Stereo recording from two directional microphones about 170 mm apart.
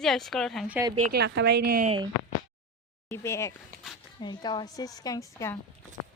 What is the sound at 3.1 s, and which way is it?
A woman's voice, 15° left (ahead or behind).